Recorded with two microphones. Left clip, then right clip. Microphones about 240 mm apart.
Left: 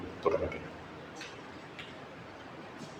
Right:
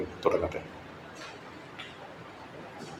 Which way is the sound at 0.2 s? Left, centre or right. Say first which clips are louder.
Right 3 dB; right.